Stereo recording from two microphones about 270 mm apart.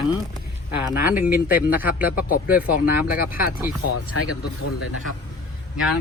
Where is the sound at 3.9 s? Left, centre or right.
Left.